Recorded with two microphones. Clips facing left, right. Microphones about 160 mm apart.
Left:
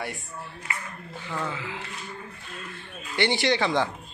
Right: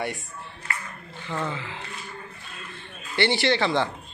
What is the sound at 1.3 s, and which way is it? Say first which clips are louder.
Speech: right 2 dB; 5° left (ahead or behind).